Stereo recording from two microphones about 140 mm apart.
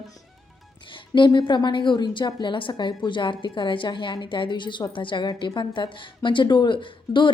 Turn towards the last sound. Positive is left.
turn(degrees=35)  # may be behind; listen again after turning